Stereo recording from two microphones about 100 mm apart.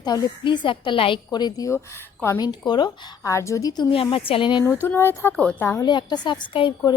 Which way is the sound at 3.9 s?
65° left (ahead or behind).